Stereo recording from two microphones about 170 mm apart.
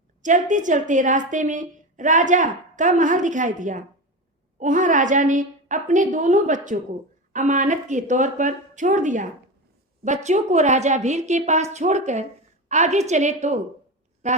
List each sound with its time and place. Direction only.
0.2 s a woman's voice: 50° right (ahead or behind)